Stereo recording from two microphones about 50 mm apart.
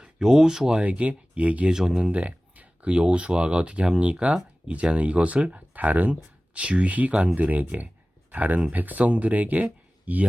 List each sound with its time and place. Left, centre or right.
0.0 s speech: centre
1.7 s speech: centre
2.1 s speech: right